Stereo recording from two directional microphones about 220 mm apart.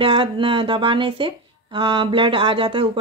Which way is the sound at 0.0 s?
20° right (ahead or behind).